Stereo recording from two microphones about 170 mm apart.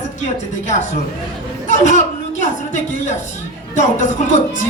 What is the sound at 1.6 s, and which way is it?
A man's voice, 45° left (ahead or behind).